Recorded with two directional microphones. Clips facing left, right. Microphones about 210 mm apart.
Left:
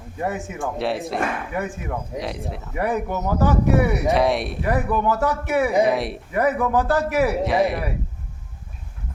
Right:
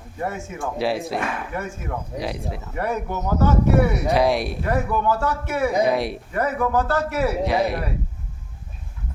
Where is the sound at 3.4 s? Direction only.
15° left (ahead or behind).